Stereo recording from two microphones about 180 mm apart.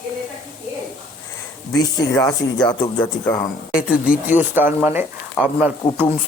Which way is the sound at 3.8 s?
5° right (ahead or behind).